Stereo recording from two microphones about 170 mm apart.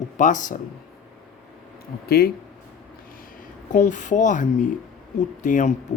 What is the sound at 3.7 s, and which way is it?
Speech, 50° left (ahead or behind).